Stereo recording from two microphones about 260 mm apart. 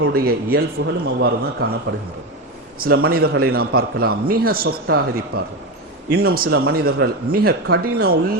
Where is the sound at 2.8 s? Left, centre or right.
Right.